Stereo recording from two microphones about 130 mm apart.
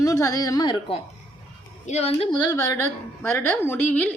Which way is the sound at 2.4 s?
25° left (ahead or behind).